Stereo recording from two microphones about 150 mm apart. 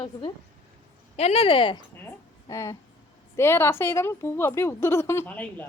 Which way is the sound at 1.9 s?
20° left (ahead or behind).